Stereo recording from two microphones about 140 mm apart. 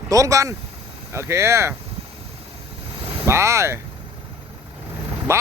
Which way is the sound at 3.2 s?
20° right (ahead or behind).